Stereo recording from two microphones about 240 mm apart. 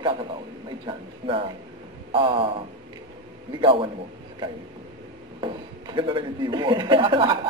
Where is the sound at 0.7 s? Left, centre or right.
Right.